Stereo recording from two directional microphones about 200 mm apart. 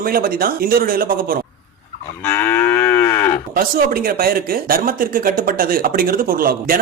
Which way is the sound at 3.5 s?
45° right (ahead or behind).